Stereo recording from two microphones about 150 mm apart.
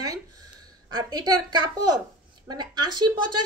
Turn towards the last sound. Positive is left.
turn(degrees=-30)  # may be behind; listen again after turning